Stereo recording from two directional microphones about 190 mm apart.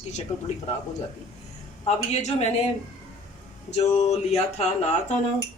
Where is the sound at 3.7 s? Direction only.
35° left (ahead or behind).